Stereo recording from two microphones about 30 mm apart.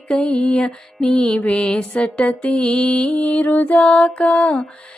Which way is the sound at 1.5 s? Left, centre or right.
Left.